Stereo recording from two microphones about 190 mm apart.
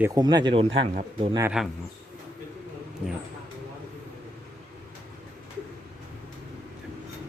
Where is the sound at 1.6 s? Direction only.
5° right (ahead or behind).